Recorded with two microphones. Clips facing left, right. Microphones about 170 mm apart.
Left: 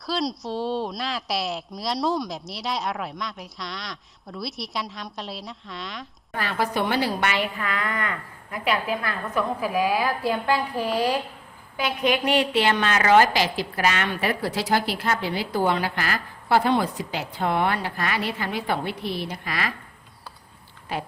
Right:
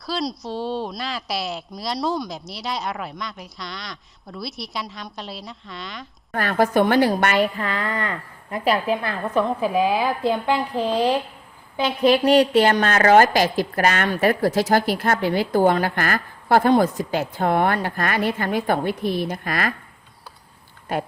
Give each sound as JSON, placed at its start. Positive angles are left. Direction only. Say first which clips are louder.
{"t": 0.0, "sound": "a woman's voice", "louder": "even", "side_deg": 0}
{"t": 6.3, "sound": "a woman's voice", "louder": "right 7 dB", "side_deg": -50}
{"t": 7.6, "sound": "a woman's voice", "louder": "right 3 dB", "side_deg": -35}
{"t": 11.8, "sound": "a woman's voice", "louder": "right 6 dB", "side_deg": -30}
{"t": 20.9, "sound": "a woman's voice", "louder": "right 5 dB", "side_deg": -50}